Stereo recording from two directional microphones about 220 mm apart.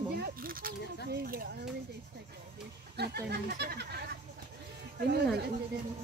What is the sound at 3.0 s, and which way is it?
Speech, 45° right (ahead or behind).